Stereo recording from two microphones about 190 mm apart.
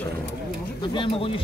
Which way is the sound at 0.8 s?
25° left (ahead or behind).